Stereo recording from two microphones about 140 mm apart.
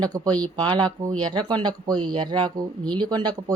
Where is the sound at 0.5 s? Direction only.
35° right (ahead or behind).